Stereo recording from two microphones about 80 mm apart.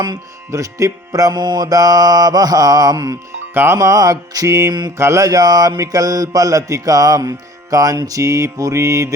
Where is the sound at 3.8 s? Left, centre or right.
Right.